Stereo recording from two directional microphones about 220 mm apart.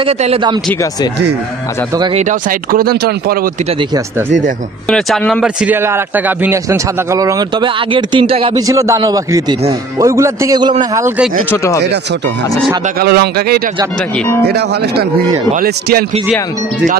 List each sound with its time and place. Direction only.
0.0 s speech: 25° right (ahead or behind)
2.0 s speech: 20° right (ahead or behind)
2.2 s speech: 40° right (ahead or behind)
4.8 s speech: 5° left (ahead or behind)
11.5 s speech: 15° left (ahead or behind)
12.8 s speech: 45° right (ahead or behind)
14.1 s speech: 5° left (ahead or behind)
14.4 s speech: 50° right (ahead or behind)